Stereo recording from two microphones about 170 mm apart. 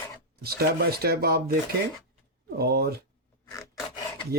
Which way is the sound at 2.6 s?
70° right (ahead or behind).